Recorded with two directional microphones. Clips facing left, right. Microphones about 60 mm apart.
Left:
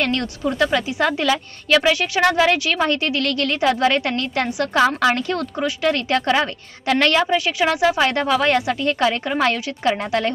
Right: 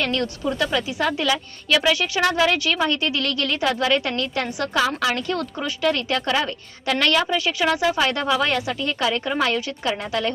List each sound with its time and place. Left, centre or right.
0.0 s a woman's voice: left
3.6 s a woman's voice: left
7.2 s a woman's voice: left